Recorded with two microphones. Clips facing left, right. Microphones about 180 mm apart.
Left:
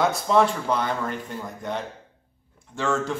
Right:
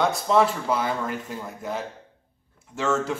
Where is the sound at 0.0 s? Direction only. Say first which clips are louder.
Even; centre (ahead or behind).